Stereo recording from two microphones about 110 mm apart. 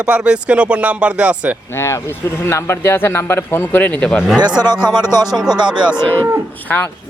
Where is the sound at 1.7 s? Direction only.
25° left (ahead or behind).